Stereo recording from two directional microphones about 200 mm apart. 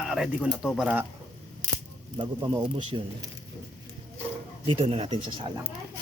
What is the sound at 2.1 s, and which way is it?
Speech, 25° right (ahead or behind).